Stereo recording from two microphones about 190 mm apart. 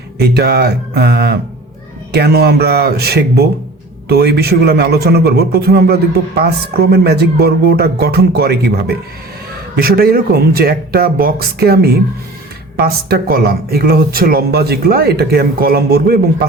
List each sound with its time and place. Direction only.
0.2 s a man's voice: 60° right (ahead or behind)
9.7 s speech: 55° right (ahead or behind)